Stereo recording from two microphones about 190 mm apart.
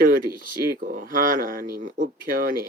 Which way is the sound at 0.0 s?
50° right (ahead or behind).